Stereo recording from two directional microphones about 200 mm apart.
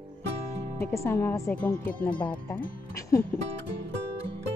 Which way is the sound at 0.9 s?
15° left (ahead or behind).